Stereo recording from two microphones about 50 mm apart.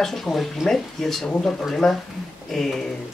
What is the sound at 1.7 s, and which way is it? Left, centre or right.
Speech, centre.